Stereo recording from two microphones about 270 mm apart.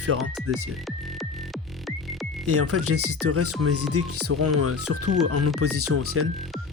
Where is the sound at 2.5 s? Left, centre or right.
Right.